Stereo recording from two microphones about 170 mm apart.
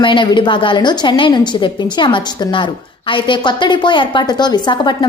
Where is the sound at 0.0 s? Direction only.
30° left (ahead or behind).